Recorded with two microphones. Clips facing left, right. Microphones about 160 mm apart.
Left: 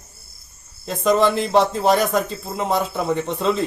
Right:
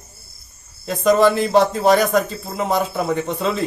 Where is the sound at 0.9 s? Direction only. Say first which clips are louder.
Right 3 dB; centre (ahead or behind).